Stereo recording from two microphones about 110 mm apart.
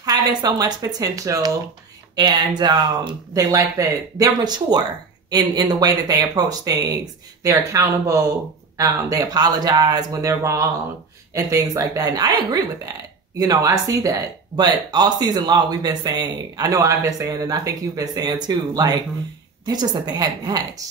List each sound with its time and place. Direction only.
0.0 s speech: 40° right (ahead or behind)
2.1 s speech: 45° right (ahead or behind)
3.5 s speech: 30° right (ahead or behind)